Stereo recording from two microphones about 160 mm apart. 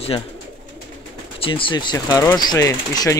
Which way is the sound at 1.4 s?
30° left (ahead or behind).